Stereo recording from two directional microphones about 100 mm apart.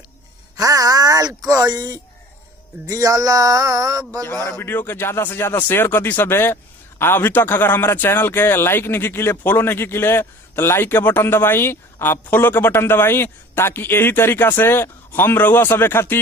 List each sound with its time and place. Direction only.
0.5 s speech: 35° right (ahead or behind)
4.4 s speech: 25° left (ahead or behind)